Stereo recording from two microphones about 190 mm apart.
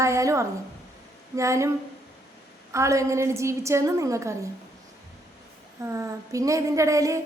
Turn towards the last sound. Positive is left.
turn(degrees=-15)  # may be behind; listen again after turning